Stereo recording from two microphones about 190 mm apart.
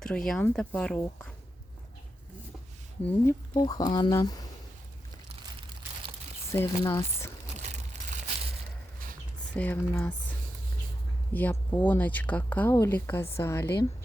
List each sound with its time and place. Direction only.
0.0 s speech: 5° left (ahead or behind)
3.2 s speech: 20° left (ahead or behind)
6.5 s speech: 15° left (ahead or behind)
9.6 s speech: 10° left (ahead or behind)
11.3 s speech: 10° left (ahead or behind)